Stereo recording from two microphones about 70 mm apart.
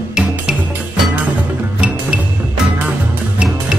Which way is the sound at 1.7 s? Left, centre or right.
Centre.